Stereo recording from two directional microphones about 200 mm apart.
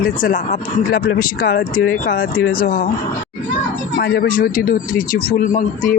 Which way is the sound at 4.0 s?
50° left (ahead or behind).